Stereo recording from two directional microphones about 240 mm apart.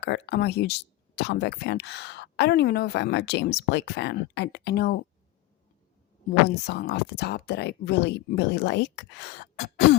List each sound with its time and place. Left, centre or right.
0.0 s speech: left
6.5 s speech: left